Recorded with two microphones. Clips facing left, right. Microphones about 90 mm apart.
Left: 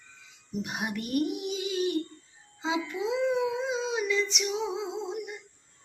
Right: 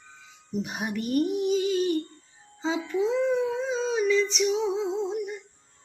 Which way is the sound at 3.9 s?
5° left (ahead or behind).